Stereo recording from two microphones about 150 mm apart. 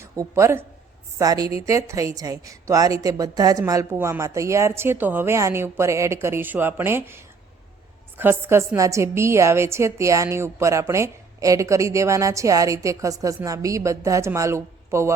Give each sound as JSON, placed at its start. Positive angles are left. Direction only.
{"t": 0.0, "sound": "a woman's voice", "side_deg": -20}
{"t": 8.2, "sound": "a woman's voice", "side_deg": -15}